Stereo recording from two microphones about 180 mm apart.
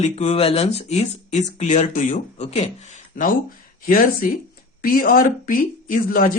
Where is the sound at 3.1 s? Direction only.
50° left (ahead or behind).